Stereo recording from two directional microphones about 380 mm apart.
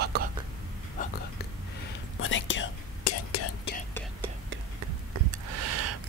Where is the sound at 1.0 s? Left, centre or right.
Centre.